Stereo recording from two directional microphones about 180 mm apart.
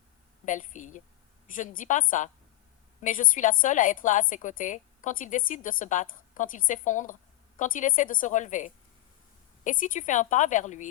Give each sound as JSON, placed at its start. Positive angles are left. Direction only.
{"t": 0.4, "sound": "a woman's voice", "side_deg": 45}